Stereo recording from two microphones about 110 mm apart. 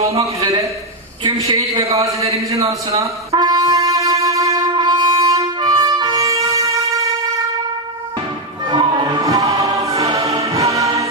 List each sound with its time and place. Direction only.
0.4 s a woman's voice: 35° right (ahead or behind)
3.3 s wind instrument: 40° right (ahead or behind)
4.7 s music: 40° right (ahead or behind)
8.6 s music: 40° right (ahead or behind)